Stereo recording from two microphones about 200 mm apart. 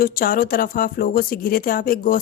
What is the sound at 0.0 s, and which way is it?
Speech, 45° left (ahead or behind).